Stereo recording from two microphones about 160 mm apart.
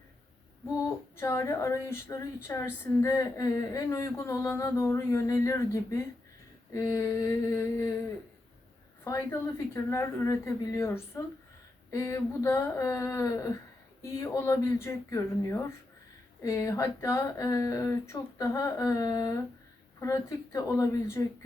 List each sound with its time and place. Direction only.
1.1 s a woman's voice: 15° left (ahead or behind)
9.0 s a woman's voice: 20° left (ahead or behind)